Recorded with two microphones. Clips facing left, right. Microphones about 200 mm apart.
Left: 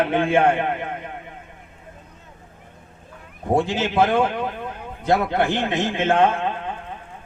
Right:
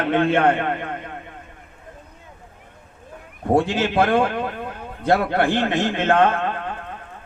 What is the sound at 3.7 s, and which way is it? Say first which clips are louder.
A man's voice: right 1 dB; 60° right (ahead or behind).